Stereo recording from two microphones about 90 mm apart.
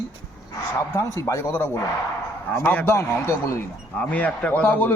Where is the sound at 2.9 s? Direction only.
30° left (ahead or behind).